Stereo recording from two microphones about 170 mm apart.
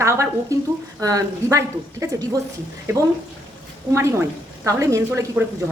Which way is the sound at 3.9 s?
15° right (ahead or behind).